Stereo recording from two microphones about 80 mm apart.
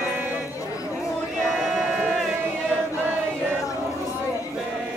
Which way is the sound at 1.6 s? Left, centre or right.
Centre.